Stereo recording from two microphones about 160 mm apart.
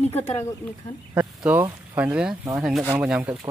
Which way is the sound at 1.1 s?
10° right (ahead or behind).